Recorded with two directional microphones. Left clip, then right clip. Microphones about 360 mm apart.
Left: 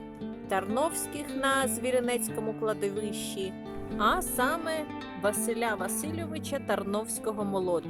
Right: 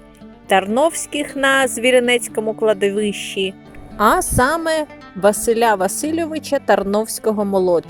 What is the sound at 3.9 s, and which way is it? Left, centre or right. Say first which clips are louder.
A woman's voice: right 12 dB; centre.